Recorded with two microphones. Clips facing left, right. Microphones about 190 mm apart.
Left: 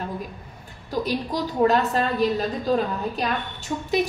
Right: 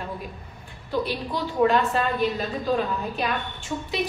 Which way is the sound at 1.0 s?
40° left (ahead or behind).